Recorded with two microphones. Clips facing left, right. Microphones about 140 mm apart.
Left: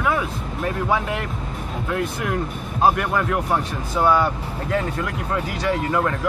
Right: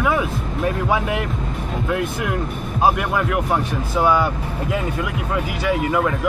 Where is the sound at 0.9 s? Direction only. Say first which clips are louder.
Right 2 dB; 10° right (ahead or behind).